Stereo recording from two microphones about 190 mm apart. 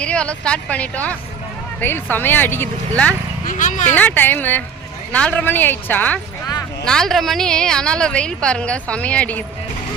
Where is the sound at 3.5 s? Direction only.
40° left (ahead or behind).